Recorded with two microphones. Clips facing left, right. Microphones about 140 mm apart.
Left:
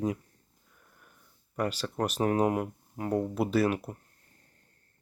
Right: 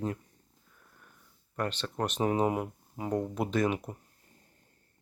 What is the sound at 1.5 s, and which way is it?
Speech, 10° left (ahead or behind).